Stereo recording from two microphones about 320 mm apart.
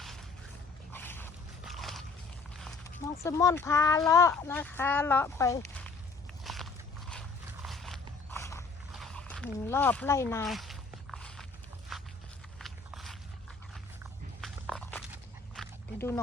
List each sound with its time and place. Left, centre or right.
0.9 s a sound: centre
3.2 s speech: centre
6.4 s walk: centre
7.1 s dog: centre
8.3 s mechanisms: centre
8.9 s a sound: centre
11.9 s walk: centre
12.5 s biting: centre
14.0 s walk: centre
15.1 s dog: centre